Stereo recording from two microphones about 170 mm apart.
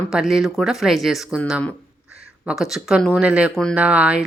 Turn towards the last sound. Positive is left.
turn(degrees=-5)  # may be behind; listen again after turning